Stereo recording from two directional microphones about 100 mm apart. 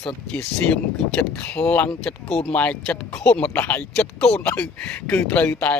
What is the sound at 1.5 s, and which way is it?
Speech, 15° left (ahead or behind).